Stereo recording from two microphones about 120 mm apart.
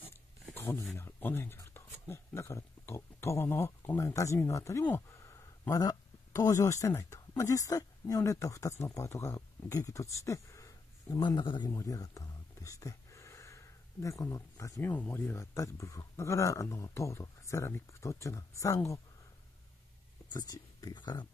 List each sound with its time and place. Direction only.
0.6 s speech: 15° left (ahead or behind)
11.1 s speech: 40° left (ahead or behind)
11.8 s a sound: 30° left (ahead or behind)
14.9 s speech: 15° left (ahead or behind)
20.3 s speech: 35° left (ahead or behind)